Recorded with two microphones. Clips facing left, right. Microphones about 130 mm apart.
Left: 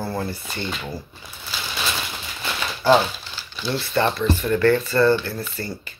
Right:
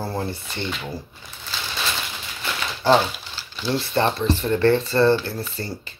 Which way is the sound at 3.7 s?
30° right (ahead or behind).